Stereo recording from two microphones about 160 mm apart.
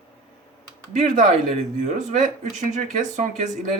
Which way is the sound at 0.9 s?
50° right (ahead or behind).